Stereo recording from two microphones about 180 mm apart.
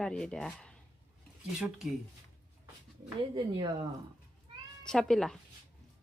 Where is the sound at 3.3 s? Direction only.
30° right (ahead or behind).